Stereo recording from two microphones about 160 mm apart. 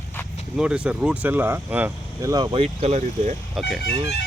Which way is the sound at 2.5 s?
40° right (ahead or behind).